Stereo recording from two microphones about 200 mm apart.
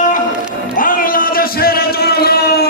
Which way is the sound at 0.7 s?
45° left (ahead or behind).